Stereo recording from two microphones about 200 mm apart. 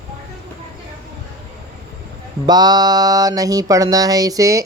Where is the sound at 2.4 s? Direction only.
20° right (ahead or behind).